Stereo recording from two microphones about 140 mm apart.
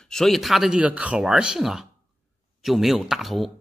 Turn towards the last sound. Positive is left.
turn(degrees=0)  # may be behind; listen again after turning